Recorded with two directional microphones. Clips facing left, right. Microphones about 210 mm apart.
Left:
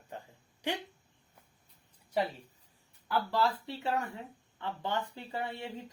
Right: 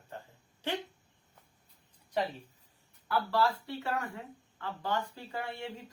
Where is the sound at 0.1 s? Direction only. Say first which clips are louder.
Left 1 dB; 15° left (ahead or behind).